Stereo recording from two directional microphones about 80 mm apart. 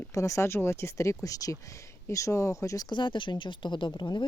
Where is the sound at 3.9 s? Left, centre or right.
Left.